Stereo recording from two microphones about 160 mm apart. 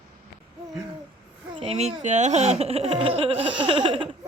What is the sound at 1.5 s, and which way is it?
Speech, 35° right (ahead or behind).